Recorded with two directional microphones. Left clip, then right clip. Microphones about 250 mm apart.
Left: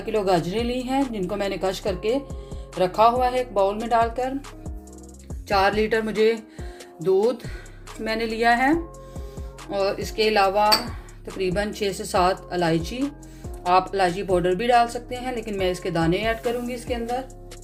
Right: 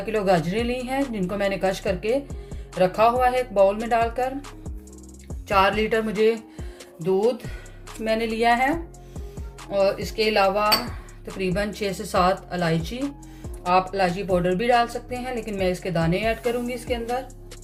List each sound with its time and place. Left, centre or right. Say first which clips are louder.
0.0 s speech: even; centre
2.2 s music: left 2 dB; centre
2.8 s speech: even; centre
5.5 s speech: even; centre
6.2 s music: even; centre
8.0 s speech: even; centre